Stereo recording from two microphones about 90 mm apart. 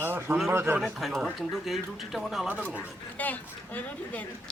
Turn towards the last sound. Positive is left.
turn(degrees=20)  # may be behind; listen again after turning